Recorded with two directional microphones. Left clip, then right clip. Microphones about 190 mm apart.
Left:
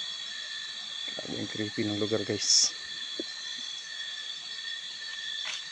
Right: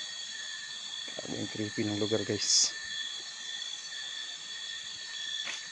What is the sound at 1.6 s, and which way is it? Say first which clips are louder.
Speech: left 2 dB; centre (ahead or behind).